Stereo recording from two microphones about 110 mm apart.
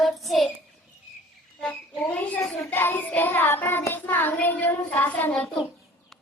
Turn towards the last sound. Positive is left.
turn(degrees=15)  # may be behind; listen again after turning